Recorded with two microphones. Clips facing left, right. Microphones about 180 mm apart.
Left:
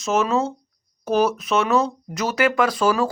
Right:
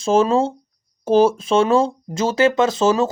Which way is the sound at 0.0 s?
30° right (ahead or behind).